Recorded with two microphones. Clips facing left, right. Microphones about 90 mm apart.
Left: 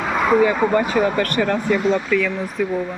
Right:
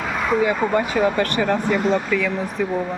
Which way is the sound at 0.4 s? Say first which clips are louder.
Left 2 dB; 20° right (ahead or behind).